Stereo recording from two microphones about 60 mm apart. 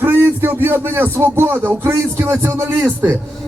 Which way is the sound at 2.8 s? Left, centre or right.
Right.